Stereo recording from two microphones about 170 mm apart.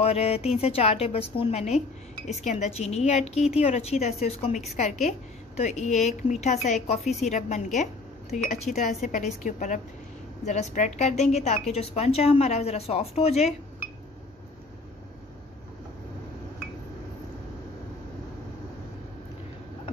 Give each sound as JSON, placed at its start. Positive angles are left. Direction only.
{"t": 0.0, "sound": "speech", "side_deg": 35}
{"t": 5.6, "sound": "speech", "side_deg": 40}